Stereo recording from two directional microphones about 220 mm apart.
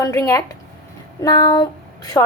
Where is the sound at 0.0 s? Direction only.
15° left (ahead or behind).